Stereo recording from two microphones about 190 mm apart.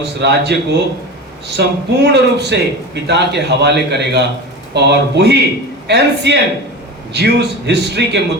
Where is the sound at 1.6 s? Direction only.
60° right (ahead or behind).